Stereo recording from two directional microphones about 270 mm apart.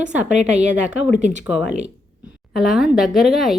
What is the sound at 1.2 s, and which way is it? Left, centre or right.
Speech, right.